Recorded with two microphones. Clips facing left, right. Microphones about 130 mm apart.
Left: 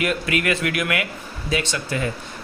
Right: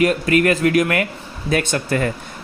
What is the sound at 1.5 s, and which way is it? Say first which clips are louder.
Speech: right 5 dB; 50° right (ahead or behind).